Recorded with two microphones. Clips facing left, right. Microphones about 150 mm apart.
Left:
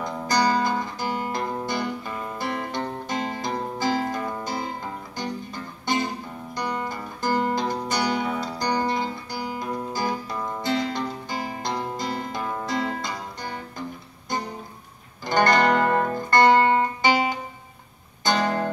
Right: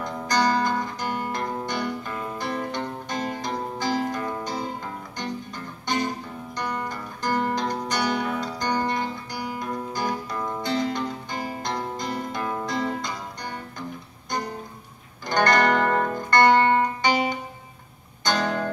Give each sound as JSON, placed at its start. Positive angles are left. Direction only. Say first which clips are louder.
{"t": 0.0, "sound": "music", "louder": "left 1 dB", "side_deg": 5}
{"t": 15.2, "sound": "music", "louder": "left 1 dB", "side_deg": 5}
{"t": 18.2, "sound": "music", "louder": "left 2 dB", "side_deg": 5}